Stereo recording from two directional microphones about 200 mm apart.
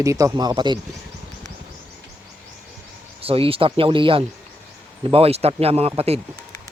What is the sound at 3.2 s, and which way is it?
Speech, 30° right (ahead or behind).